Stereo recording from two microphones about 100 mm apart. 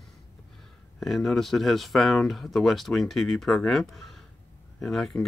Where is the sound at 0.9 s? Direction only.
5° left (ahead or behind).